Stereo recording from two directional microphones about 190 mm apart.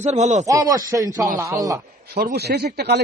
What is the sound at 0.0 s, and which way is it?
Speech, 35° right (ahead or behind).